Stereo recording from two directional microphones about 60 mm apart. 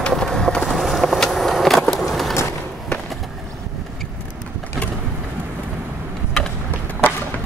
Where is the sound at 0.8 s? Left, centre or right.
Centre.